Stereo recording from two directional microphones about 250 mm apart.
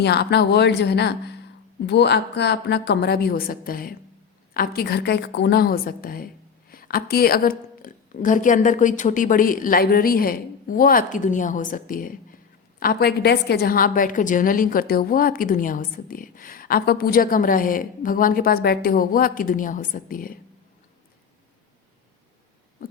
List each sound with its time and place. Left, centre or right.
0.0 s a woman's voice: left